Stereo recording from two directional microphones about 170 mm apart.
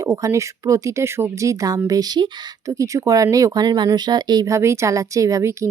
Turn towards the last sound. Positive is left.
turn(degrees=-15)  # may be behind; listen again after turning